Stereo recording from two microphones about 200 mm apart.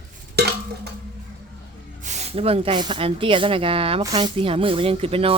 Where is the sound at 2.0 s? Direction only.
35° right (ahead or behind).